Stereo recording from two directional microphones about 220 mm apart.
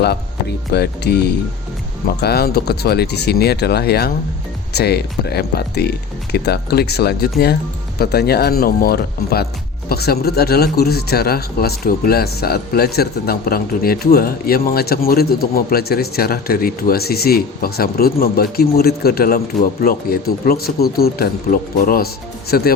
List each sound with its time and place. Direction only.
0.7 s speech: 50° left (ahead or behind)